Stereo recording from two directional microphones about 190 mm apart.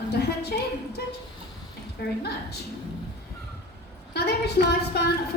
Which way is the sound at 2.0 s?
55° left (ahead or behind).